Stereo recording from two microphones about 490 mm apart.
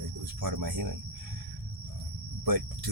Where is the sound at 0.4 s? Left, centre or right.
Right.